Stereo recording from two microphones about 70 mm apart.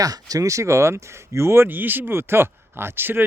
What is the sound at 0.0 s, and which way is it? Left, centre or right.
Speech, right.